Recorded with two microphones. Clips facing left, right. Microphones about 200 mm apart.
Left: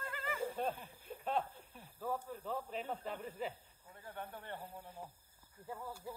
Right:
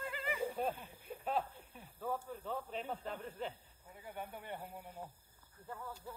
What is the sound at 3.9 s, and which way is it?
Speech, 10° right (ahead or behind).